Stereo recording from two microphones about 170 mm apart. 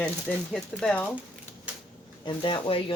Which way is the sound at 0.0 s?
5° left (ahead or behind).